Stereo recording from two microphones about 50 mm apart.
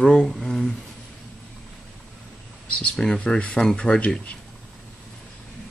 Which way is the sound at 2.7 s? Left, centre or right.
Centre.